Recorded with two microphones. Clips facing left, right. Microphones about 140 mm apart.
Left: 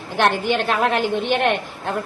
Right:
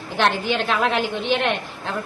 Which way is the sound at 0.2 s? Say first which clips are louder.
Left 2 dB; 50° left (ahead or behind).